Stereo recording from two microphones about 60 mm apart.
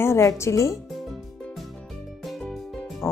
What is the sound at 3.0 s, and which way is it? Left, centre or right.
Music, left.